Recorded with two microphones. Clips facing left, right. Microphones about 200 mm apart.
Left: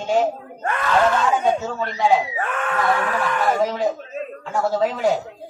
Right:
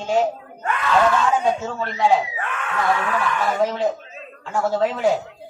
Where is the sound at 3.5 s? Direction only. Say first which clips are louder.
Even; centre (ahead or behind).